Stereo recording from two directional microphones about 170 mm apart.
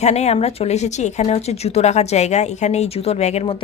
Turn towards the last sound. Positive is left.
turn(degrees=35)  # may be behind; listen again after turning